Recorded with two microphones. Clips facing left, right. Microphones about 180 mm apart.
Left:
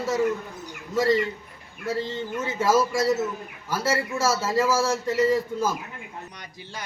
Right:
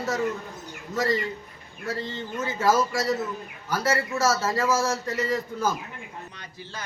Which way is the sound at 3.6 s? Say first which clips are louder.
Even; 25° left (ahead or behind).